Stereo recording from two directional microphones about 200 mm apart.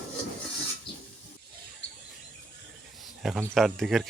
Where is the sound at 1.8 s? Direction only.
65° left (ahead or behind).